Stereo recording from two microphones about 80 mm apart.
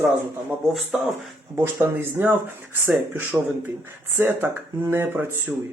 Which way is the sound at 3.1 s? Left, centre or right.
Right.